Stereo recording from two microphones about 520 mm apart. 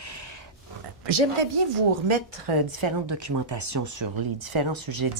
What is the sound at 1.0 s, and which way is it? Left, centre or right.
Speech, right.